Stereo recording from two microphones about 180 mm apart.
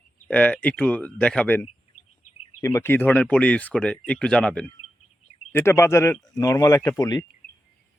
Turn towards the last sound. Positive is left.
turn(degrees=20)  # may be behind; listen again after turning